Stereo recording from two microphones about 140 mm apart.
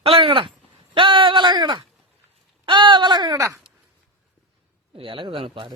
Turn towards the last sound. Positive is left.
turn(degrees=-35)  # may be behind; listen again after turning